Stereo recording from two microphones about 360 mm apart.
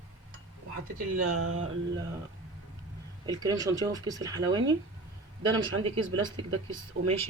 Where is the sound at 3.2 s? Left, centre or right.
Centre.